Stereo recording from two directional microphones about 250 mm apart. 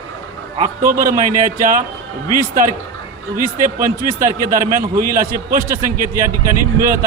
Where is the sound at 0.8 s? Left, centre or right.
Right.